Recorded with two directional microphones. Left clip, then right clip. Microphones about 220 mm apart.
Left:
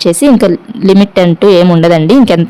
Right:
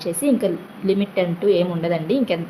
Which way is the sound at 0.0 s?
50° left (ahead or behind).